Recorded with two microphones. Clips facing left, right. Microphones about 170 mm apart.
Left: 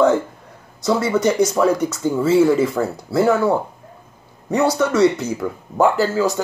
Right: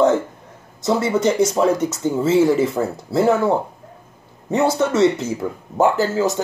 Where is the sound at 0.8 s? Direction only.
25° right (ahead or behind).